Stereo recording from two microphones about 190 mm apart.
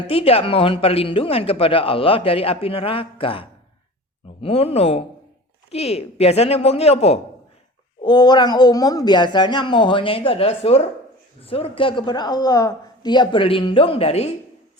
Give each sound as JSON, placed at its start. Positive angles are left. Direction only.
{"t": 0.1, "sound": "a woman's voice", "side_deg": 30}
{"t": 8.0, "sound": "speech", "side_deg": 25}